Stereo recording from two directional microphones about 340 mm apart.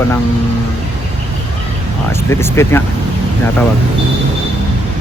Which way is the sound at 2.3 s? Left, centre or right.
Centre.